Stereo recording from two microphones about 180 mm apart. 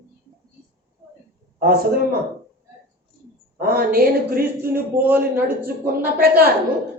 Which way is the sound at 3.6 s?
55° right (ahead or behind).